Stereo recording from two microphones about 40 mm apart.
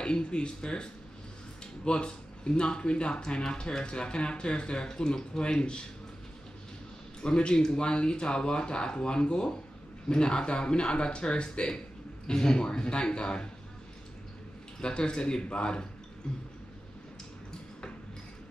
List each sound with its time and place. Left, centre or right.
0.0 s speech: left
1.9 s speech: left
7.2 s speech: left
14.8 s speech: left
16.2 s a sound: centre